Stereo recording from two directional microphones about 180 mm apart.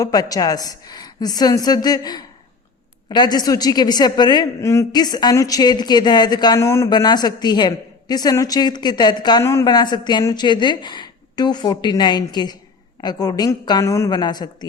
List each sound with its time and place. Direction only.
0.0 s a woman's voice: 20° left (ahead or behind)